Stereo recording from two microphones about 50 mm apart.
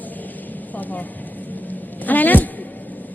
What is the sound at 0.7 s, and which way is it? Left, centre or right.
A woman's voice, left.